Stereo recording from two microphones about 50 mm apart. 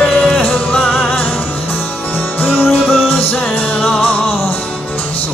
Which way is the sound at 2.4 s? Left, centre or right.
Left.